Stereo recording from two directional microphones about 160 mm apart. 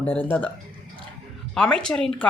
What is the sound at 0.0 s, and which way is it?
Speech, 10° left (ahead or behind).